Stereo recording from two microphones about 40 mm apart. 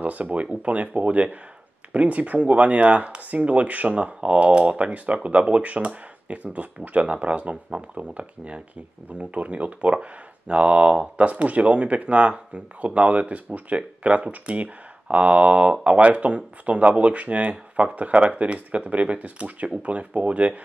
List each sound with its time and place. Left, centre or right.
0.0 s speech: right